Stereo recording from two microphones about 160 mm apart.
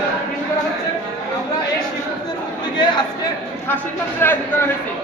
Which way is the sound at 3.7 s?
10° left (ahead or behind).